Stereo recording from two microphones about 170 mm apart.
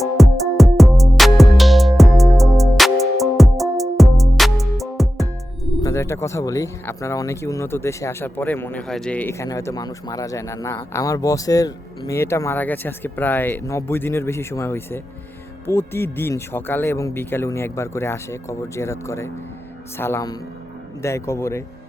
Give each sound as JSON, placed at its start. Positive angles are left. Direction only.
{"t": 0.0, "sound": "music", "side_deg": 0}
{"t": 5.8, "sound": "speech", "side_deg": 15}
{"t": 9.5, "sound": "speech", "side_deg": 20}